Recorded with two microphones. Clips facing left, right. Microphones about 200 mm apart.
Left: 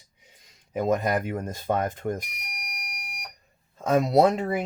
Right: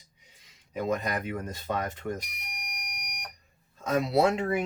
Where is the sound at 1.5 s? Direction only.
50° left (ahead or behind).